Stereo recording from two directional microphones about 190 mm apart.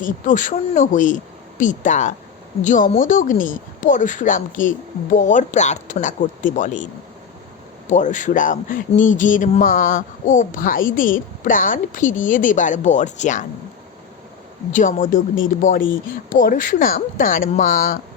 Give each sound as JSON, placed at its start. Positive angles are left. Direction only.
{"t": 0.0, "sound": "speech", "side_deg": 45}
{"t": 7.9, "sound": "speech", "side_deg": 40}
{"t": 14.7, "sound": "speech", "side_deg": 45}